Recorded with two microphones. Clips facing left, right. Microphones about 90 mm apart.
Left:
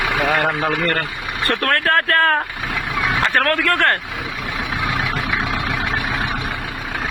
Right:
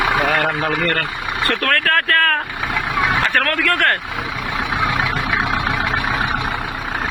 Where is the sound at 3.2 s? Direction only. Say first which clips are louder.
Even; 20° left (ahead or behind).